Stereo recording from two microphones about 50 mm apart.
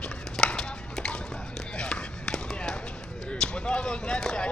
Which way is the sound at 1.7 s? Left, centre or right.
Centre.